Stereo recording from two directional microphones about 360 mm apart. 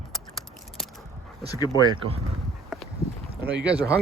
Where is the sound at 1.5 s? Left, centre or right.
Centre.